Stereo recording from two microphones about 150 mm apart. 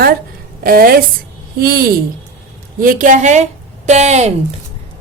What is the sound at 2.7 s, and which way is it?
Speech, 60° right (ahead or behind).